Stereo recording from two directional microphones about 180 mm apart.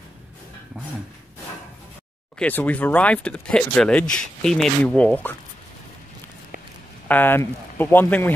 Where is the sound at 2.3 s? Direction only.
10° left (ahead or behind).